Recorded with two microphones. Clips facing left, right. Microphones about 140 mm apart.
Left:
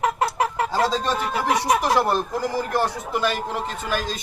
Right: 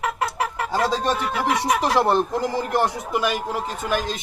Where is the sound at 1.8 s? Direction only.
25° right (ahead or behind); by 4.0 s 10° right (ahead or behind).